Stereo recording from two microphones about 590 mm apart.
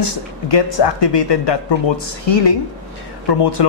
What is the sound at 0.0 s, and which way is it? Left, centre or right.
Speech, left.